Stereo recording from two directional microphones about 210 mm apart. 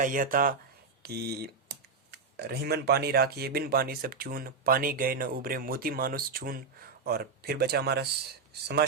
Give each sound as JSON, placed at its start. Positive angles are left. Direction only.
{"t": 0.0, "sound": "speech", "side_deg": -40}